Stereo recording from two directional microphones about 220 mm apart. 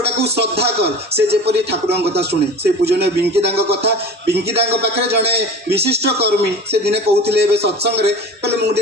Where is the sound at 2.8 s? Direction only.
50° right (ahead or behind).